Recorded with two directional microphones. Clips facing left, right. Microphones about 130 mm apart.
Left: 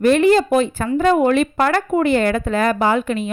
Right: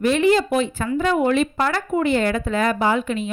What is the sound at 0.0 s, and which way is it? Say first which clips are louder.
A woman's voice: left 4 dB; 50° left (ahead or behind).